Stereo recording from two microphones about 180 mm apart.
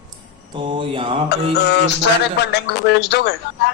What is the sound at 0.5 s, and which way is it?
Mantra, 30° right (ahead or behind).